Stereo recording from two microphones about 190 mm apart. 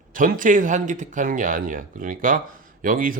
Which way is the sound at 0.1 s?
45° right (ahead or behind).